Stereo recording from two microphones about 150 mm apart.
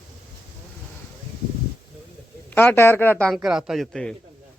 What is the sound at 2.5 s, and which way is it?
A man's voice, 15° left (ahead or behind).